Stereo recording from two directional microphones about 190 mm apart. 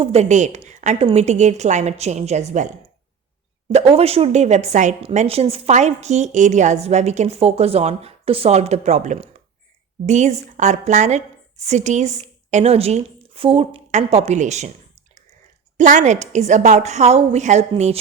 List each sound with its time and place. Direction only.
0.0 s a woman's voice: 35° right (ahead or behind)
15.8 s a woman's voice: 40° right (ahead or behind)